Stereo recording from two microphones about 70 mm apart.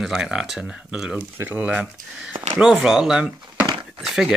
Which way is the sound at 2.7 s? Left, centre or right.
Centre.